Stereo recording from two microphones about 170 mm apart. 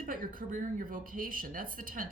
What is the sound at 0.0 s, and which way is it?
A woman's voice, 55° right (ahead or behind).